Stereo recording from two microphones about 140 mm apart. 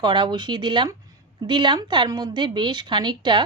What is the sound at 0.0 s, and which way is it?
A woman's voice, 35° right (ahead or behind).